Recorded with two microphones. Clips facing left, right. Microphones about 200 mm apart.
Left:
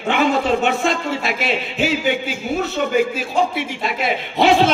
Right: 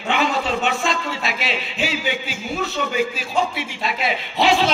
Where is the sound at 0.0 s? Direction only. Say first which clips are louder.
Left 4 dB; 50° left (ahead or behind).